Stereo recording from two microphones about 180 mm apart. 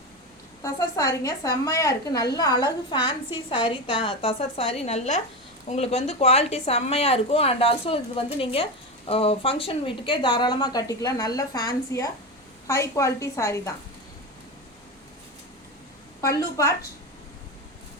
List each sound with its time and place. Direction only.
0.6 s a woman's voice: 20° left (ahead or behind)